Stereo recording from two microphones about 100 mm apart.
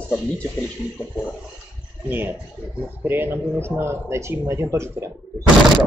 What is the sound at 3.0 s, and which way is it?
Speech, 20° right (ahead or behind).